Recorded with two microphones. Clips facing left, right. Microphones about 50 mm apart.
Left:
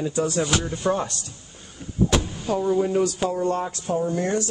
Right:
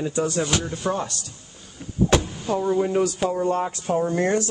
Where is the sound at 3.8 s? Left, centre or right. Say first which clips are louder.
Right 2 dB; right.